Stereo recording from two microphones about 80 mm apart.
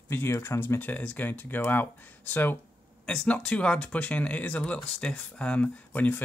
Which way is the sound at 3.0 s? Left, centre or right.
Centre.